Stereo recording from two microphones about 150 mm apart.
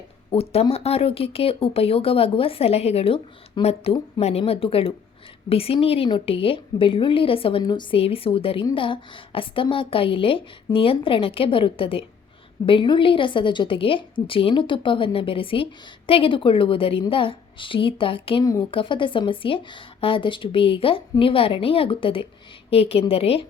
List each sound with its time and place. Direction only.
0.3 s a woman's voice: 40° left (ahead or behind)